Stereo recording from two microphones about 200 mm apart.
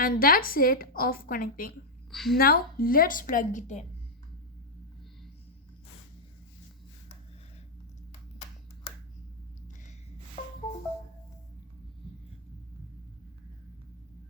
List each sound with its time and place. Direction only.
0.0 s a woman's voice: 45° left (ahead or behind)
2.0 s a woman's voice: centre (ahead or behind)
2.4 s a woman's voice: 45° left (ahead or behind)
10.4 s music: 35° left (ahead or behind)